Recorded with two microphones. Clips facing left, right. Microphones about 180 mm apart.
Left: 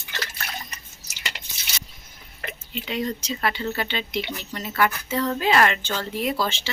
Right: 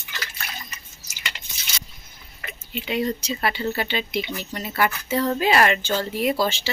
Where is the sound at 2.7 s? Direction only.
10° right (ahead or behind).